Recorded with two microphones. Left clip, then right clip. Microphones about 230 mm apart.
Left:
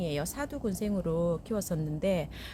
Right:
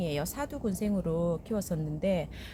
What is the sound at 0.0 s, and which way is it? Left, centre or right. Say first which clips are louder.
A woman's voice: even; centre.